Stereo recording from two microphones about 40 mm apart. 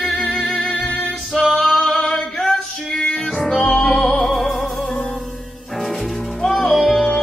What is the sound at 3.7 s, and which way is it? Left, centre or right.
Music, centre.